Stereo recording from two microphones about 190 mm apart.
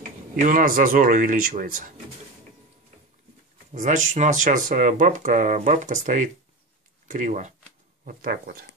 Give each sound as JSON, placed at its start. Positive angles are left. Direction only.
{"t": 0.4, "sound": "speech", "side_deg": -45}
{"t": 3.7, "sound": "speech", "side_deg": -40}